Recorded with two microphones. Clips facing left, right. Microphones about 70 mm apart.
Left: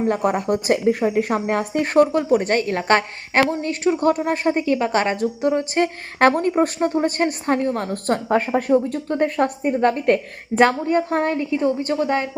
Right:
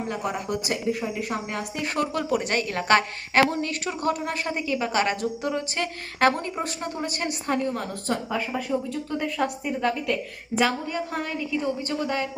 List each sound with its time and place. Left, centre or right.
0.1 s a woman's voice: left
4.6 s a woman's voice: left
11.5 s a woman's voice: left